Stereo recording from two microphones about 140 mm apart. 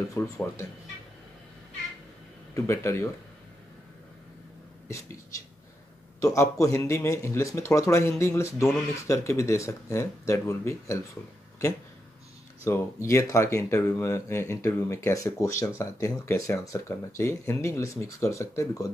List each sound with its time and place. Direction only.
0.1 s speech: 20° left (ahead or behind)
2.5 s speech: 20° left (ahead or behind)
6.2 s speech: 25° left (ahead or behind)
12.6 s speech: 20° left (ahead or behind)